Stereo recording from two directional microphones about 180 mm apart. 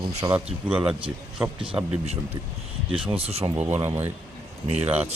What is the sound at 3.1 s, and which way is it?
Speech, 35° right (ahead or behind).